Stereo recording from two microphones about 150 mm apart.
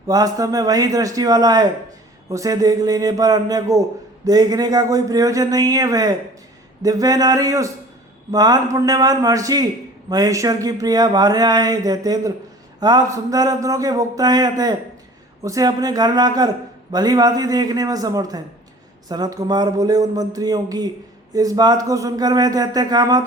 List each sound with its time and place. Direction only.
0.1 s speech: 25° right (ahead or behind)